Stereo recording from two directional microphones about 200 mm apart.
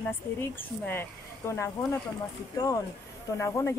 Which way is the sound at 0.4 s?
10° left (ahead or behind).